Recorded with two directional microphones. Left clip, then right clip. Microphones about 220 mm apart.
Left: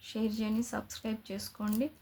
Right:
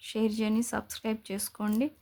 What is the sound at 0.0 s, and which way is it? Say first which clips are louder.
Speech: right 5 dB; 40° right (ahead or behind).